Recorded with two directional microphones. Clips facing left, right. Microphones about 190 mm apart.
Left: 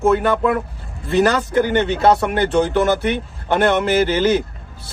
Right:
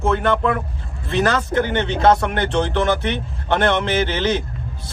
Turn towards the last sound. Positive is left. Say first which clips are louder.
# left 4 dB
turn(degrees=10)  # may be behind; listen again after turning